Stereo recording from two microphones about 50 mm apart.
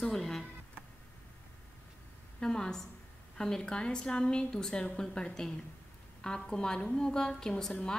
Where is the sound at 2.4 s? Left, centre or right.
Centre.